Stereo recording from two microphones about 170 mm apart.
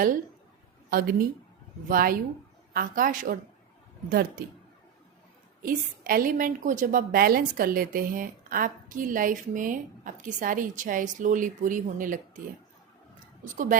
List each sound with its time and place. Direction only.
0.9 s a woman's voice: 60° right (ahead or behind)
5.6 s a woman's voice: 55° right (ahead or behind)
13.4 s a woman's voice: 50° right (ahead or behind)